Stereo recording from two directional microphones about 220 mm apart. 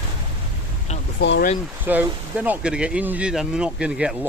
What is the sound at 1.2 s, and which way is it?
Speech, 55° left (ahead or behind).